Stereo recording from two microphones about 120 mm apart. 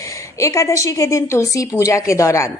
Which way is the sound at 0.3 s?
25° left (ahead or behind).